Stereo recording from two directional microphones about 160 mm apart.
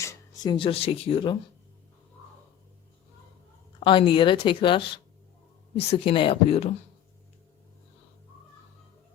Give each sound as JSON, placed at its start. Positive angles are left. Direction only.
{"t": 0.0, "sound": "a sound", "side_deg": 20}
{"t": 0.5, "sound": "a woman's voice", "side_deg": 35}
{"t": 3.8, "sound": "a woman's voice", "side_deg": 30}